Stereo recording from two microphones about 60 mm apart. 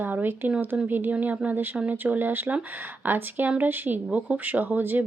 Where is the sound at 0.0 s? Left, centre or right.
Right.